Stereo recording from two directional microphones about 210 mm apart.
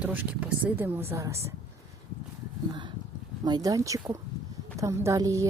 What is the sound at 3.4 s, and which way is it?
A woman's voice, 20° right (ahead or behind).